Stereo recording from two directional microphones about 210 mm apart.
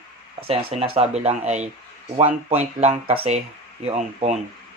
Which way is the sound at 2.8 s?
30° right (ahead or behind).